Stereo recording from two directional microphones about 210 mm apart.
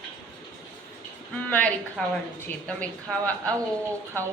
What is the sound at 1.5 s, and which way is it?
A woman's voice, 10° left (ahead or behind).